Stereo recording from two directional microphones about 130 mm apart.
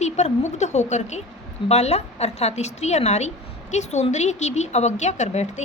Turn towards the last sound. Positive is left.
turn(degrees=60)  # may be behind; listen again after turning